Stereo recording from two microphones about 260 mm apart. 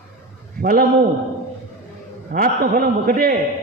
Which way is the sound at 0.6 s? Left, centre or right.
Right.